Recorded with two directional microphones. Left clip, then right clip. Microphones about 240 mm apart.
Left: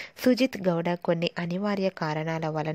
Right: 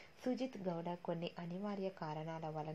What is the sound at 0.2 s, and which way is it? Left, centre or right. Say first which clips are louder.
A woman's voice: left 18 dB; left.